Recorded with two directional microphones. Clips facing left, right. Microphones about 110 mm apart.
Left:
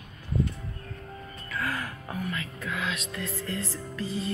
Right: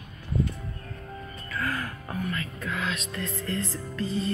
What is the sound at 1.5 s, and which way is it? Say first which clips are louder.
Music: right 1 dB; 10° left (ahead or behind).